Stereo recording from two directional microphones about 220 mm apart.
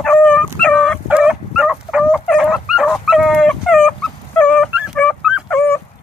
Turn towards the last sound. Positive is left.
turn(degrees=10)  # may be behind; listen again after turning